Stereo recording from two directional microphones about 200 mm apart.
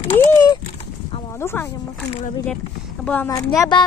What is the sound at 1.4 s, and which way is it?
Speech, 10° left (ahead or behind).